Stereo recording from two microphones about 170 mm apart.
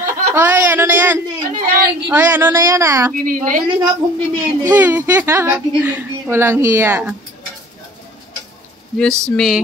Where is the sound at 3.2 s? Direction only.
55° right (ahead or behind).